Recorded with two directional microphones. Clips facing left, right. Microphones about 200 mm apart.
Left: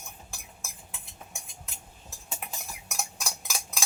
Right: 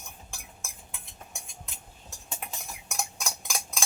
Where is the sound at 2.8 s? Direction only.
Centre (ahead or behind).